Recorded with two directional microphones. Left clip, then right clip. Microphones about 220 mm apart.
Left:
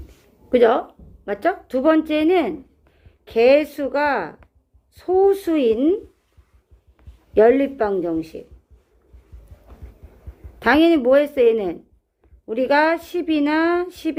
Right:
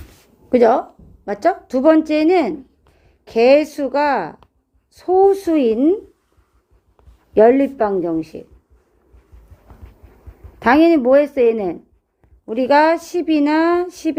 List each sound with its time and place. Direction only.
0.5 s a woman's voice: 30° right (ahead or behind)
7.3 s a woman's voice: 35° right (ahead or behind)
10.6 s a woman's voice: 30° right (ahead or behind)